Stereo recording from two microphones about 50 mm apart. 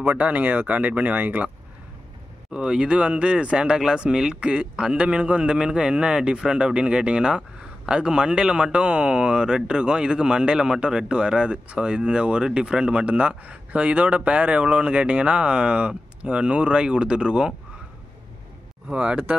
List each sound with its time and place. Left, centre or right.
0.0 s speech: right
2.5 s a man's voice: centre
18.9 s a man's voice: right